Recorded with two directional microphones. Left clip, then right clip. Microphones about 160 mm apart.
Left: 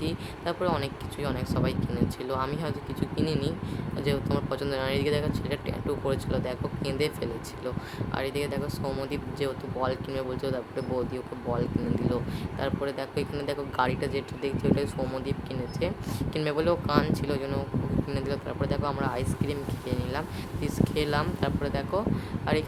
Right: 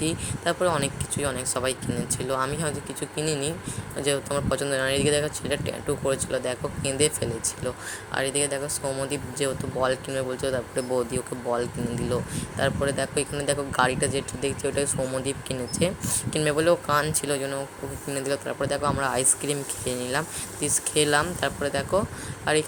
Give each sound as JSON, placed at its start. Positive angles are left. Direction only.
{"t": 0.0, "sound": "speech", "side_deg": -20}